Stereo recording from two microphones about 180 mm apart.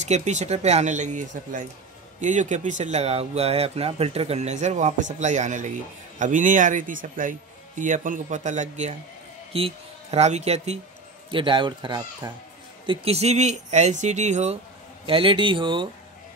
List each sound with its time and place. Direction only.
0.0 s speech: 40° right (ahead or behind)